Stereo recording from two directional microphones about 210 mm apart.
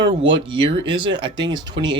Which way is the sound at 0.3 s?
25° right (ahead or behind).